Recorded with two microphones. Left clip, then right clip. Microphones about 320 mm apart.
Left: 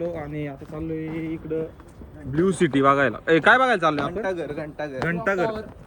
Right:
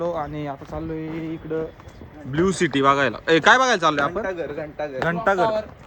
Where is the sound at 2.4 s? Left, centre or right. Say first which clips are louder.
Right 1 dB; centre.